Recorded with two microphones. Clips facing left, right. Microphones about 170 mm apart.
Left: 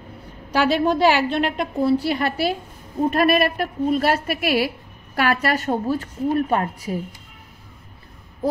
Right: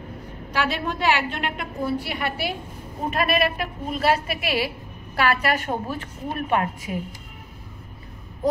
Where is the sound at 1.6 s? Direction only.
35° left (ahead or behind).